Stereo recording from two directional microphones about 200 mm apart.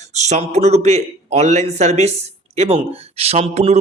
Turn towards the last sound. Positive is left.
turn(degrees=-30)  # may be behind; listen again after turning